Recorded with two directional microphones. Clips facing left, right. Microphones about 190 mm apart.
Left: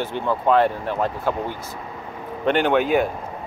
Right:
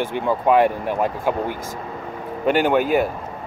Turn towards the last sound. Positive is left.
turn(degrees=-5)  # may be behind; listen again after turning